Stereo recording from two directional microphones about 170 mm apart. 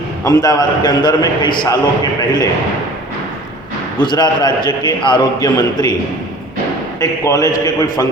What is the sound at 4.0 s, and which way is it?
A man's voice, 25° left (ahead or behind).